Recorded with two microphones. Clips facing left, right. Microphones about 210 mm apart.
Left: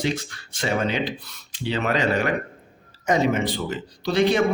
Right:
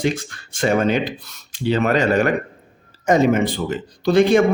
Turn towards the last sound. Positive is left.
turn(degrees=-50)  # may be behind; listen again after turning